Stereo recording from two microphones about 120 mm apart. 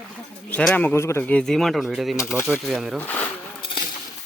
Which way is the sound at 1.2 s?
10° left (ahead or behind).